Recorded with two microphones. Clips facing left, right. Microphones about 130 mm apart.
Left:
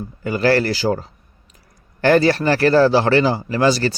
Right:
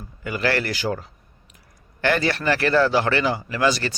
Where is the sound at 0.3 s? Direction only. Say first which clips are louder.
Left 7 dB; 35° left (ahead or behind).